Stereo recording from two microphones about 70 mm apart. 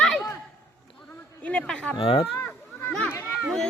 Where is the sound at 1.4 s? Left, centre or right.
Centre.